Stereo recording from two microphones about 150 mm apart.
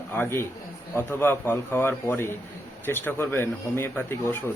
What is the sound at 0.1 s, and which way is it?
Speech, 15° left (ahead or behind).